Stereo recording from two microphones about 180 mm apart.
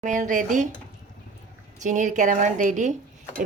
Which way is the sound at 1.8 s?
45° right (ahead or behind).